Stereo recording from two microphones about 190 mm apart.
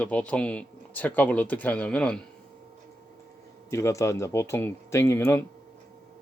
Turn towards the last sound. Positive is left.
turn(degrees=15)  # may be behind; listen again after turning